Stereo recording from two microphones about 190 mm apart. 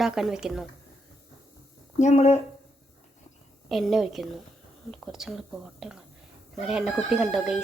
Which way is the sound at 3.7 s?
Centre (ahead or behind).